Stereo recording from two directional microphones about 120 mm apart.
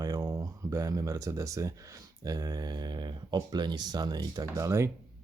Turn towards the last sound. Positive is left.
turn(degrees=-25)  # may be behind; listen again after turning